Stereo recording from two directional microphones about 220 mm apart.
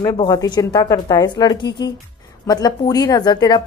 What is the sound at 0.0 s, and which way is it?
A woman's voice, 20° left (ahead or behind).